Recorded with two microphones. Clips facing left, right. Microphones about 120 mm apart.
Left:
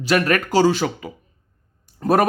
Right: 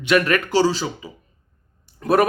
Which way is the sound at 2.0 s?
40° left (ahead or behind).